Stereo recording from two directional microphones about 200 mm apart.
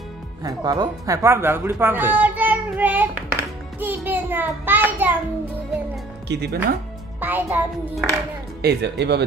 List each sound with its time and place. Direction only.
0.4 s speech: 20° right (ahead or behind)
6.2 s speech: 60° right (ahead or behind)
7.2 s a child's voice: 10° right (ahead or behind)
8.6 s speech: 55° right (ahead or behind)